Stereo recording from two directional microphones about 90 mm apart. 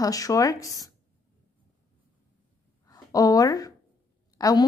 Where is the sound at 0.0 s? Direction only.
40° left (ahead or behind).